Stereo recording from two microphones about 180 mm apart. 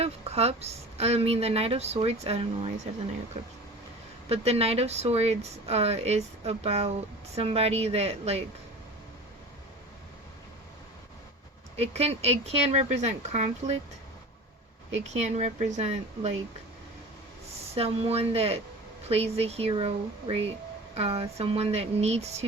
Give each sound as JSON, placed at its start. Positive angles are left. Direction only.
{"t": 0.0, "sound": "speech", "side_deg": -35}
{"t": 4.3, "sound": "speech", "side_deg": -35}
{"t": 11.8, "sound": "speech", "side_deg": -35}
{"t": 15.0, "sound": "speech", "side_deg": -40}
{"t": 17.7, "sound": "speech", "side_deg": -35}